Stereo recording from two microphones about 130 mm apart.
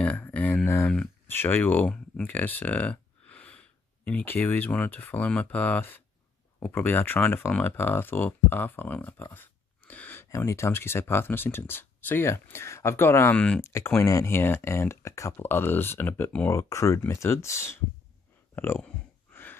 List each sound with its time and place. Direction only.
0.0 s speech: 10° left (ahead or behind)